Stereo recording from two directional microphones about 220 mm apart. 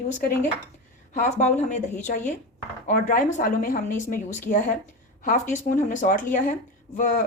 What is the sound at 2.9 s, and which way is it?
Speech, 35° left (ahead or behind).